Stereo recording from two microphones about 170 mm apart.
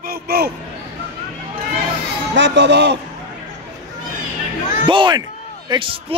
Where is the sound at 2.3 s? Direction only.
90° right.